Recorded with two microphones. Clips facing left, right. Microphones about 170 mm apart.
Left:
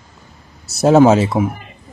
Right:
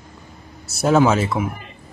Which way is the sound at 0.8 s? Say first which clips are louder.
Left 6 dB; 35° left (ahead or behind).